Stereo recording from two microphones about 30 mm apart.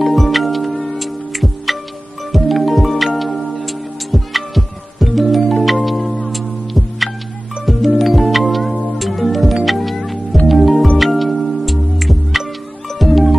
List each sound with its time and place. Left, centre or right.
0.0 s music: centre